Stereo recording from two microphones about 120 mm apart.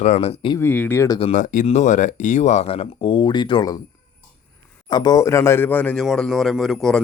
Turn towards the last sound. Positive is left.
turn(degrees=5)  # may be behind; listen again after turning